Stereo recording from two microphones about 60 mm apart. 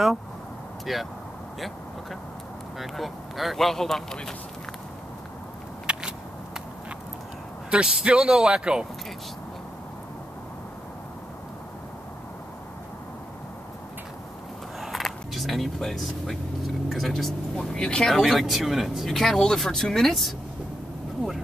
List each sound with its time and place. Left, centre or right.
0.9 s speech: centre
2.8 s speech: centre
5.9 s a sound: centre
7.7 s speech: centre
14.8 s speech: centre
18.1 s speech: centre